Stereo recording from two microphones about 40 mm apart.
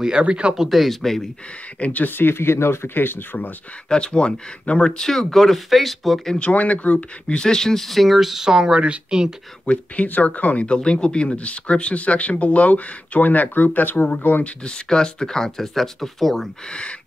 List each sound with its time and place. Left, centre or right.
0.2 s speech: right
0.6 s speech: centre
1.8 s speech: left
2.1 s speech: left
3.9 s speech: left
4.9 s speech: centre
6.4 s speech: left
7.3 s speech: centre
8.5 s speech: centre
9.7 s speech: left
10.7 s speech: left
14.4 s speech: left; by 16.4 s centre
16.6 s speech: left